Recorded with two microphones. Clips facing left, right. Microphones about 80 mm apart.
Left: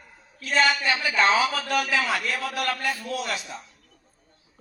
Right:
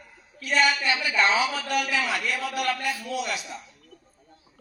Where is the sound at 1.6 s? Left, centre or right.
Left.